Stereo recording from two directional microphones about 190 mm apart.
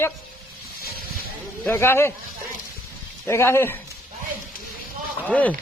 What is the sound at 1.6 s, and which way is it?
Speech, 15° left (ahead or behind).